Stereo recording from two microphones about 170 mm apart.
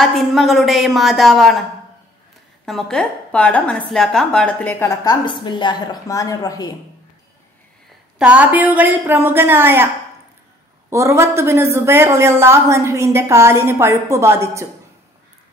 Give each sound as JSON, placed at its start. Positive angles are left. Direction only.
{"t": 0.0, "sound": "a woman's voice", "side_deg": 0}
{"t": 2.6, "sound": "a woman's voice", "side_deg": 5}
{"t": 8.2, "sound": "a woman's voice", "side_deg": -10}
{"t": 10.9, "sound": "a woman's voice", "side_deg": -15}